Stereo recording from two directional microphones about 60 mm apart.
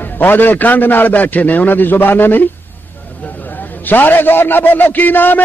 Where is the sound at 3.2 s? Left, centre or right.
Left.